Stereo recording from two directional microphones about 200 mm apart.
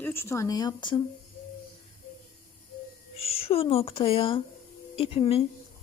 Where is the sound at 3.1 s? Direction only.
30° left (ahead or behind).